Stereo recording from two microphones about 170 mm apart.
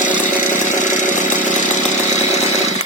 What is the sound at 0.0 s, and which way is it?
Chainsaw, 50° left (ahead or behind).